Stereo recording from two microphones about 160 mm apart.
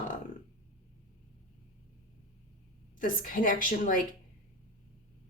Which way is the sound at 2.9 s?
55° left (ahead or behind).